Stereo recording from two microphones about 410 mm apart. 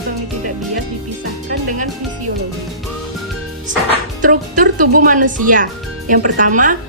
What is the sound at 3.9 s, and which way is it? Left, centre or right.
Speech, centre.